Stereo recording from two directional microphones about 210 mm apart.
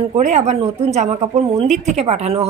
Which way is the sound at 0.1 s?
30° right (ahead or behind).